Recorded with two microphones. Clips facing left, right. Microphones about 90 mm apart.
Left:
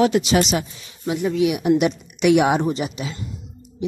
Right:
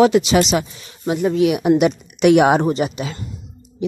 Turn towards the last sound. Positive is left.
turn(degrees=-55)  # may be behind; listen again after turning